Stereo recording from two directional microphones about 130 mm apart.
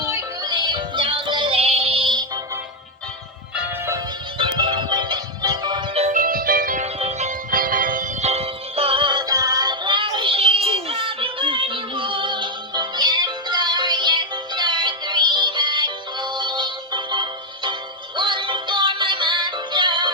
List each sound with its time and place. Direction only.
0.1 s music: 20° right (ahead or behind)
0.5 s music: 35° right (ahead or behind)
4.4 s music: 35° right (ahead or behind)
6.0 s music: 80° right
6.8 s music: 55° right (ahead or behind); by 17.7 s 35° right (ahead or behind)
18.2 s synthetic singing: 40° right (ahead or behind)